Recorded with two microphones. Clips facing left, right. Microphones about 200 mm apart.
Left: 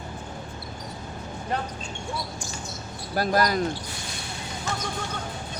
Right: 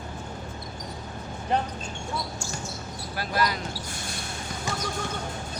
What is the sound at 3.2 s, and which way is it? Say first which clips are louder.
Speech: left 5 dB; 45° left (ahead or behind).